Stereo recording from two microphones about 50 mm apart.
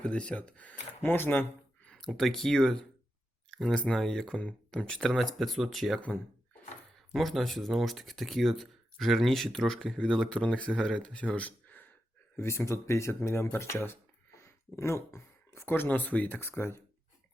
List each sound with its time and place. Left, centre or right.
0.0 s speech: left
1.0 s speech: left
2.0 s speech: centre
7.1 s speech: centre; by 11.9 s left
12.4 s speech: left
14.3 s a sound: left
15.9 s speech: left
16.4 s speech: left